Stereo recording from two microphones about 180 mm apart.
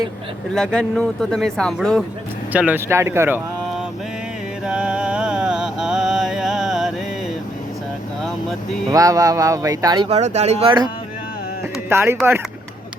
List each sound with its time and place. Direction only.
0.5 s a man's voice: 5° left (ahead or behind)
2.5 s speech: 10° right (ahead or behind)
4.6 s music: 5° right (ahead or behind)
8.9 s speech: 20° right (ahead or behind)
10.1 s speech: 40° right (ahead or behind)
11.9 s speech: 15° right (ahead or behind)